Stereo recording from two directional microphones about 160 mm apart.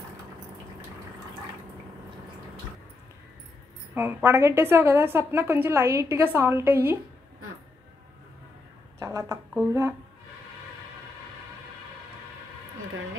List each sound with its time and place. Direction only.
3.9 s a woman's voice: 15° right (ahead or behind)
9.0 s a woman's voice: 20° right (ahead or behind)